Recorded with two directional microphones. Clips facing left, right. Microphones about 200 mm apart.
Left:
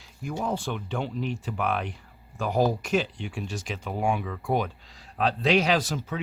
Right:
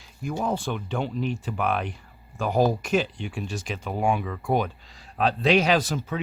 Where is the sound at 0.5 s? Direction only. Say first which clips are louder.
Right 2 dB; 50° right (ahead or behind).